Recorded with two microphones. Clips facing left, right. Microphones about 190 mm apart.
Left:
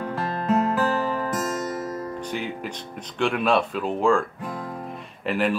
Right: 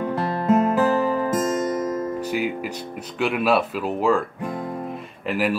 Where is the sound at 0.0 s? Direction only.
20° right (ahead or behind).